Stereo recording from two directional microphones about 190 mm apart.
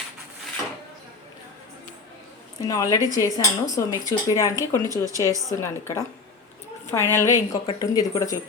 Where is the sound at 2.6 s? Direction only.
20° left (ahead or behind).